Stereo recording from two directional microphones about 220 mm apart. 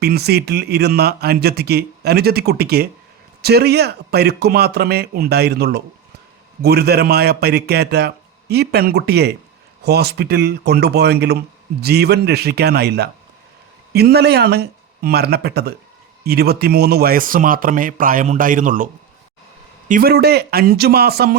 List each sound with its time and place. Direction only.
0.0 s speech: 45° right (ahead or behind)
19.9 s speech: 40° right (ahead or behind)